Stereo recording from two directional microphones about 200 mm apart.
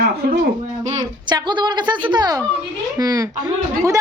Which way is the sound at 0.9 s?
20° right (ahead or behind).